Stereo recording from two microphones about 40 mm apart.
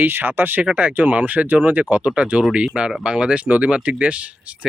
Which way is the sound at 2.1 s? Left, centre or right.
Right.